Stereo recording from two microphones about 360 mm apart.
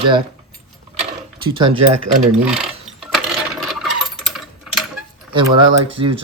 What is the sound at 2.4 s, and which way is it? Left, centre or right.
Coin, centre.